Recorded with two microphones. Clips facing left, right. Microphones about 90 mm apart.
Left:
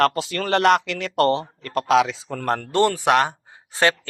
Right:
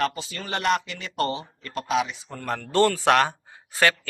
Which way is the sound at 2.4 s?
40° left (ahead or behind).